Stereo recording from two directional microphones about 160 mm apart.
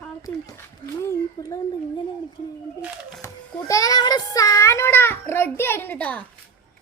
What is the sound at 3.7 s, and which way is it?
A child's voice, 20° left (ahead or behind).